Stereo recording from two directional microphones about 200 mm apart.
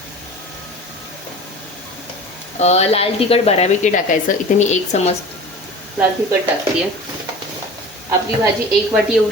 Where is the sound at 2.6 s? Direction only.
35° left (ahead or behind).